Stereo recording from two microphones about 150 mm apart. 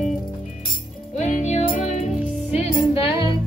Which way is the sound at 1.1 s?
50° left (ahead or behind).